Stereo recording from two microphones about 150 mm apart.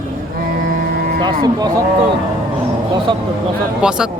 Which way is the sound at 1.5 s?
25° right (ahead or behind).